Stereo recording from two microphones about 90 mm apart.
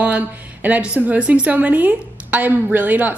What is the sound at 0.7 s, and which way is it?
A woman's voice, 15° right (ahead or behind).